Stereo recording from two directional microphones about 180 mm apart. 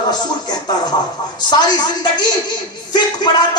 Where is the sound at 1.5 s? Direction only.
25° left (ahead or behind).